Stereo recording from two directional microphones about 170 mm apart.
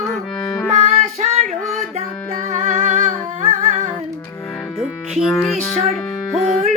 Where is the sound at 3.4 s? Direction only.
45° right (ahead or behind).